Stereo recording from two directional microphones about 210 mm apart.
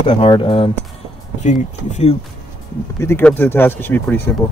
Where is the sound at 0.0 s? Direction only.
25° left (ahead or behind).